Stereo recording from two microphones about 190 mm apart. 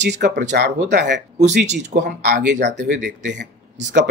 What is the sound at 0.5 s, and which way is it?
Speech, 55° right (ahead or behind).